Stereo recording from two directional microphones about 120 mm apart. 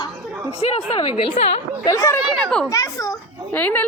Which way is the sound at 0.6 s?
55° left (ahead or behind).